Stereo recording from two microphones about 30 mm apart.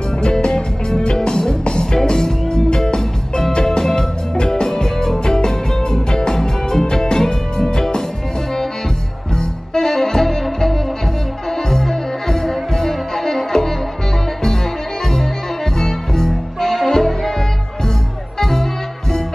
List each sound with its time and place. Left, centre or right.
0.2 s music: left
9.4 s music: centre
11.5 s music: centre
15.8 s music: centre
18.4 s music: centre